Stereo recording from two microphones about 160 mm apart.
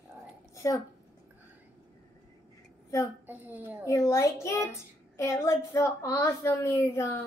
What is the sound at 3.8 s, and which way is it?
A child's voice, 20° left (ahead or behind).